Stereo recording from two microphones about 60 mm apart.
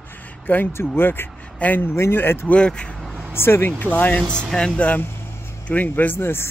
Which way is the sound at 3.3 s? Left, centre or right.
Left.